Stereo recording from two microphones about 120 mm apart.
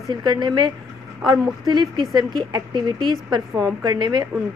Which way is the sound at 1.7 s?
40° right (ahead or behind).